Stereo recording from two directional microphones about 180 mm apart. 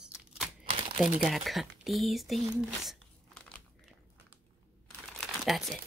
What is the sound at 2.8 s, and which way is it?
Crunch, centre (ahead or behind).